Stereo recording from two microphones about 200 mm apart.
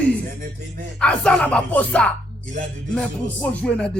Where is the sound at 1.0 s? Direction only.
5° left (ahead or behind).